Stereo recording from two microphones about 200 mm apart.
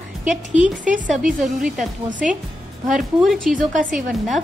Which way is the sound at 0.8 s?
40° right (ahead or behind).